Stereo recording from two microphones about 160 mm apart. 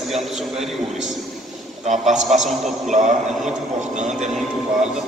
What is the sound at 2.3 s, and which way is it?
Speech, centre (ahead or behind).